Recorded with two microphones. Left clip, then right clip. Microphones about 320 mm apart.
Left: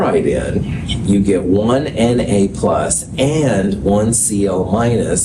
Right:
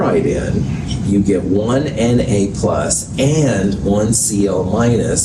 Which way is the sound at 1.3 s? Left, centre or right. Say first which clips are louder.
Left 2 dB; left.